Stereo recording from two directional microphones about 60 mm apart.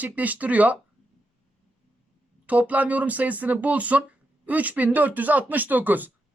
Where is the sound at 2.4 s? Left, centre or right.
Right.